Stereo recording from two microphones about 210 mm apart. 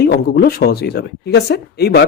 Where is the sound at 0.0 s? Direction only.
50° left (ahead or behind).